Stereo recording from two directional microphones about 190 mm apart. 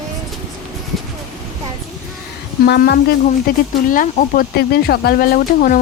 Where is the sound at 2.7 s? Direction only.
60° left (ahead or behind).